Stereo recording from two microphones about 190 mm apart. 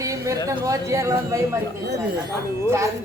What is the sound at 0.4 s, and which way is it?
Speech, 20° right (ahead or behind).